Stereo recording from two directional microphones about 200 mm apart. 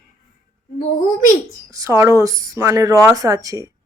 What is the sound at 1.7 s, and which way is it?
Speech, 15° right (ahead or behind).